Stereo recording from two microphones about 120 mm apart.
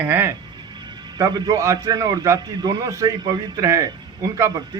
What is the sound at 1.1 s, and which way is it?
A man's voice, 30° right (ahead or behind).